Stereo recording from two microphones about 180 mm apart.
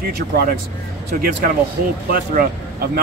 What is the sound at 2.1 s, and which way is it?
Speech, 55° right (ahead or behind).